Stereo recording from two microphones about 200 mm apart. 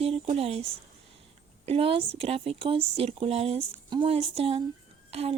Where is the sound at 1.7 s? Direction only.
30° right (ahead or behind).